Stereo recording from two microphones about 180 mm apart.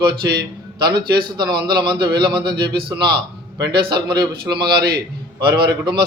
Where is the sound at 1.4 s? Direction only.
25° right (ahead or behind).